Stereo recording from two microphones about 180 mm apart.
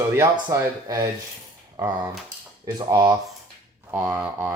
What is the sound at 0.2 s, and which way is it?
Speech, 25° right (ahead or behind).